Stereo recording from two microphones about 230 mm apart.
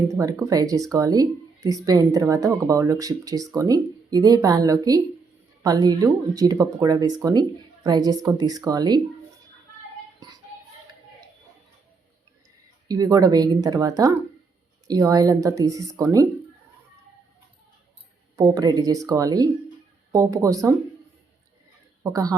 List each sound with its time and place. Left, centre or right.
0.1 s speech: centre
12.9 s speech: centre
18.3 s speech: centre
22.1 s speech: centre